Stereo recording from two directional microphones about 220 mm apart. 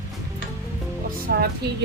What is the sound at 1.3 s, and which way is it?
Speech, 50° right (ahead or behind).